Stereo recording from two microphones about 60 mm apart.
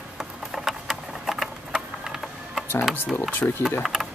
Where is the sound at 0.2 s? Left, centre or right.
Centre.